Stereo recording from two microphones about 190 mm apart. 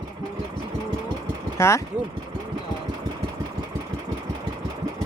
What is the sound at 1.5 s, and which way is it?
Speech, 15° left (ahead or behind).